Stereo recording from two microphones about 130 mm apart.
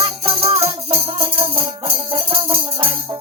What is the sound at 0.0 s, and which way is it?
Music, 45° right (ahead or behind).